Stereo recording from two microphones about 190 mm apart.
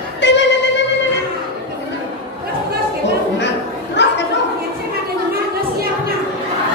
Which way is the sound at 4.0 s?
65° left (ahead or behind).